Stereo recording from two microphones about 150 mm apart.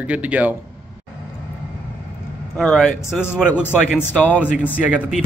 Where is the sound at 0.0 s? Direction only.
10° right (ahead or behind).